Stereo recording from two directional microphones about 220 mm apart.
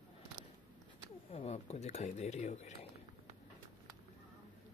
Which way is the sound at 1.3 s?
30° left (ahead or behind).